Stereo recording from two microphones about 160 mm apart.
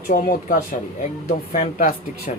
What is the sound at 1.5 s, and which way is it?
Speech, 60° left (ahead or behind).